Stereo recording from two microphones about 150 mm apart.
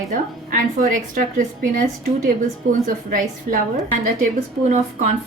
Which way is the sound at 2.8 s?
65° right (ahead or behind).